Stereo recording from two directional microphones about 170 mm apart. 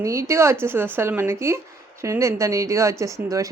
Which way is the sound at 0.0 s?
15° right (ahead or behind).